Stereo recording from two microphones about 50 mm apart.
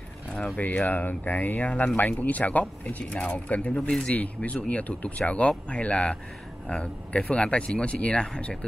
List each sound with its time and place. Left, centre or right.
0.6 s speech: left